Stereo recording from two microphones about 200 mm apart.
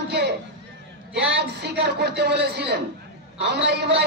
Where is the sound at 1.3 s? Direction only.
55° right (ahead or behind).